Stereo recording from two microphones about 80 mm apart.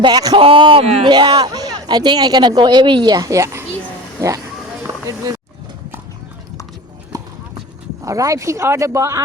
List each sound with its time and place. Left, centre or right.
0.0 s speech: right
0.3 s a man's voice: right
1.5 s speech: right
8.0 s speech: right